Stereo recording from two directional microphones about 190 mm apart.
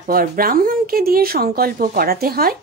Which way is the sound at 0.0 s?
50° right (ahead or behind).